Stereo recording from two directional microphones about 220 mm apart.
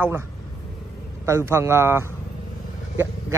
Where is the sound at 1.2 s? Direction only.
10° right (ahead or behind).